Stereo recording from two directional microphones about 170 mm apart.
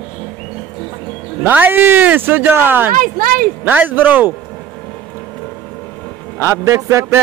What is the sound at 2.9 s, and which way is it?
Speech, 55° right (ahead or behind).